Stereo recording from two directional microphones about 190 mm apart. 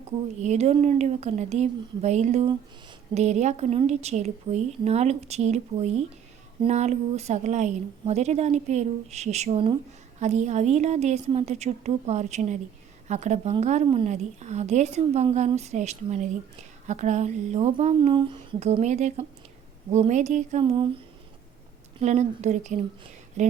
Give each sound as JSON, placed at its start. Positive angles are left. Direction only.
{"t": 0.4, "sound": "a woman's voice", "side_deg": -35}
{"t": 22.0, "sound": "a woman's voice", "side_deg": -35}